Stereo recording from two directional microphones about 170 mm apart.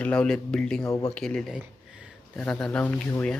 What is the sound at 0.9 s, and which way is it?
Speech, 20° left (ahead or behind).